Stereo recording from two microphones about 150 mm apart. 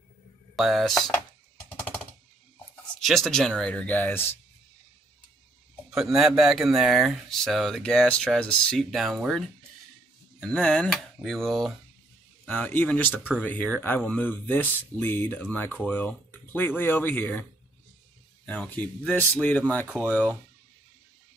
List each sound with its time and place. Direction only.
0.6 s speech: centre (ahead or behind)
3.0 s speech: centre (ahead or behind)
5.9 s speech: centre (ahead or behind)
10.4 s speech: 5° left (ahead or behind)
12.4 s speech: 15° left (ahead or behind)